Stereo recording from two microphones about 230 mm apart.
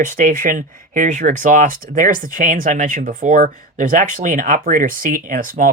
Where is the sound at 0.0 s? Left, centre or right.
Right.